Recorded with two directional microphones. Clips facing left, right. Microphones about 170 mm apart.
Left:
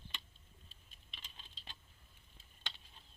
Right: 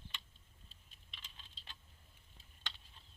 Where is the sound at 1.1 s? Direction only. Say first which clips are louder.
Left 1 dB; 25° left (ahead or behind).